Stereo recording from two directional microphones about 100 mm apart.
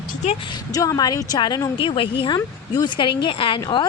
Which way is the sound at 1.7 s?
60° left (ahead or behind).